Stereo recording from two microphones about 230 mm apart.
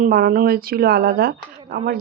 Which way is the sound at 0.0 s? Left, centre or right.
Right.